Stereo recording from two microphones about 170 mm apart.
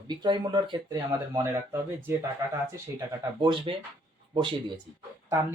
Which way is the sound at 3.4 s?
30° right (ahead or behind).